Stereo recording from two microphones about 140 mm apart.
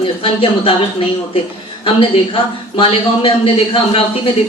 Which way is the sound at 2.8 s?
40° left (ahead or behind).